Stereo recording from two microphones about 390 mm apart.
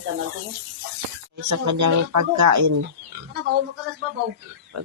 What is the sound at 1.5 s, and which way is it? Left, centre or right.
Speech, right.